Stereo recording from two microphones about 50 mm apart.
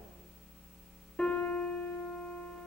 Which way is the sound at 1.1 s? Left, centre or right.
Left.